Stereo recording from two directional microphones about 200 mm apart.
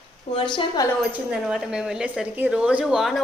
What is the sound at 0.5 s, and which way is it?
Speech, 25° left (ahead or behind).